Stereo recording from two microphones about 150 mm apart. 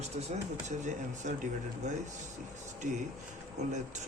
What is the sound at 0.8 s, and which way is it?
Speech, 55° right (ahead or behind).